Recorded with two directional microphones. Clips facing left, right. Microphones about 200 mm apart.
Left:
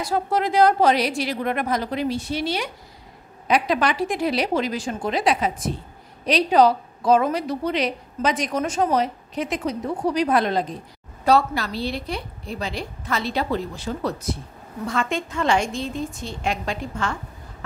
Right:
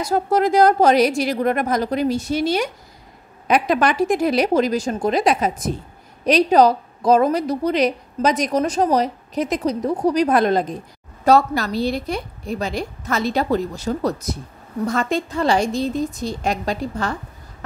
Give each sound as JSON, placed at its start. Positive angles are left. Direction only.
{"t": 0.0, "sound": "a woman's voice", "side_deg": -45}